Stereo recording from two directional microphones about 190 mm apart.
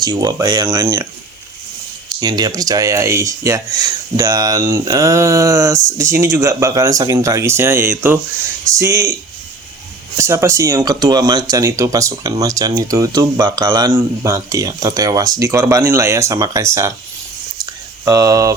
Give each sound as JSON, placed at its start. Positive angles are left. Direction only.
{"t": 0.0, "sound": "speech", "side_deg": -20}
{"t": 2.2, "sound": "speech", "side_deg": -20}
{"t": 10.2, "sound": "speech", "side_deg": -15}
{"t": 18.0, "sound": "speech", "side_deg": -15}